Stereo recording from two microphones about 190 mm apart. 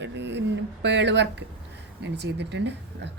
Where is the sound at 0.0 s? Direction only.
65° right (ahead or behind).